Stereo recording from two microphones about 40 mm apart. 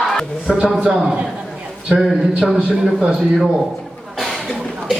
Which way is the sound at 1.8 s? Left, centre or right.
Centre.